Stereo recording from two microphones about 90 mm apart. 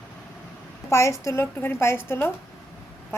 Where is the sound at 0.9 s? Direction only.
35° left (ahead or behind).